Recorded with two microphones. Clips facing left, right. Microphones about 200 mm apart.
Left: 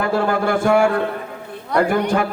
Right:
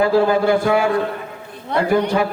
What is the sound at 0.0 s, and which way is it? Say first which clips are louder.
Speech: right 4 dB; 50° left (ahead or behind).